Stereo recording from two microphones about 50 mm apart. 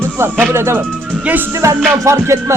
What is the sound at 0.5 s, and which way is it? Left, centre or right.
Music, right.